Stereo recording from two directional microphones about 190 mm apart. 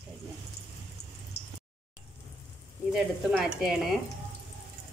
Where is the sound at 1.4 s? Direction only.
60° left (ahead or behind).